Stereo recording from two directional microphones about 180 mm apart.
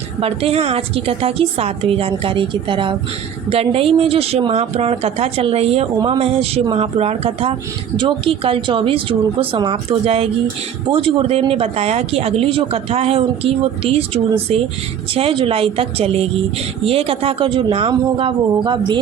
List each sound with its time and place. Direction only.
0.2 s speech: 35° right (ahead or behind)